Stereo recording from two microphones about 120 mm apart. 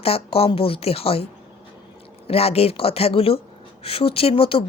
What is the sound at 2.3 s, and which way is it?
A woman's voice, 55° left (ahead or behind).